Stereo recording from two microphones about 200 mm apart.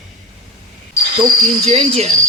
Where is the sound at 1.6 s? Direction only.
30° right (ahead or behind).